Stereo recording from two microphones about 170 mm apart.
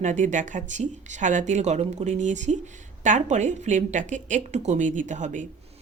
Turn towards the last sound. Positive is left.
turn(degrees=-45)  # may be behind; listen again after turning